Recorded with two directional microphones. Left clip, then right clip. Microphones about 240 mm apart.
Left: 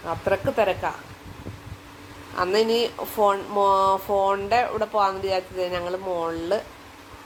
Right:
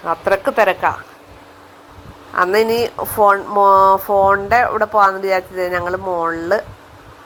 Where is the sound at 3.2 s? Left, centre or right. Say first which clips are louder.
Right 8 dB; right.